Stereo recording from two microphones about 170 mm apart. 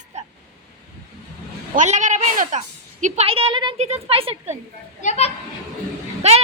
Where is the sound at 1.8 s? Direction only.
45° right (ahead or behind).